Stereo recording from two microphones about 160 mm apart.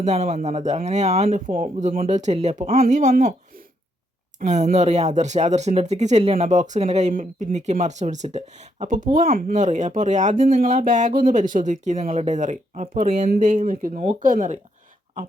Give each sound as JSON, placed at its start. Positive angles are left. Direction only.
{"t": 0.0, "sound": "speech", "side_deg": -45}
{"t": 4.4, "sound": "speech", "side_deg": -50}